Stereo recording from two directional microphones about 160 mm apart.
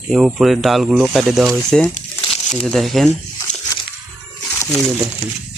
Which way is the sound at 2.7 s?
Centre (ahead or behind).